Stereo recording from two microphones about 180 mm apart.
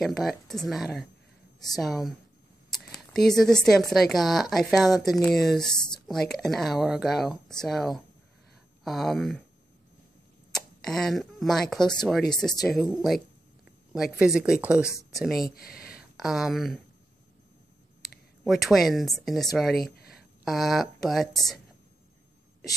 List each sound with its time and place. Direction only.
0.0 s speech: centre (ahead or behind)
2.7 s a sound: centre (ahead or behind)
3.9 s speech: centre (ahead or behind)
10.5 s speech: 5° left (ahead or behind)
15.5 s a sound: 55° left (ahead or behind)
16.0 s speech: centre (ahead or behind)
18.4 s speech: centre (ahead or behind)